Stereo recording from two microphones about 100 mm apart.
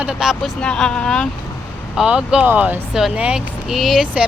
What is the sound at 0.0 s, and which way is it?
Speech, 5° right (ahead or behind).